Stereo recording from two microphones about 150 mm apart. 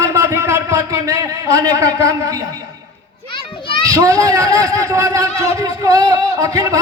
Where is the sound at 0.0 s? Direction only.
20° right (ahead or behind).